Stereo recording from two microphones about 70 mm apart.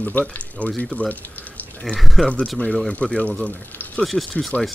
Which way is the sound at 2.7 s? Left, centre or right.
Centre.